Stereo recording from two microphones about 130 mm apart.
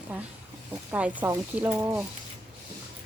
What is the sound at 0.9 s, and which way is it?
Speech, 10° right (ahead or behind).